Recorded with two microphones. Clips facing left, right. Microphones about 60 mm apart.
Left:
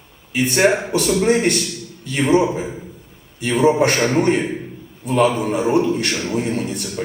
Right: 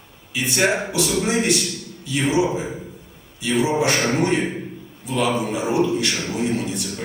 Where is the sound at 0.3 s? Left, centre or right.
Left.